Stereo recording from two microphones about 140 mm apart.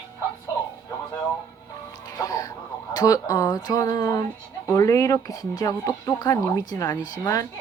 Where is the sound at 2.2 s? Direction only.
25° left (ahead or behind).